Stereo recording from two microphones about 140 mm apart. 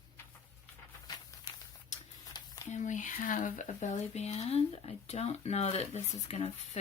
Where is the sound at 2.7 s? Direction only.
60° left (ahead or behind).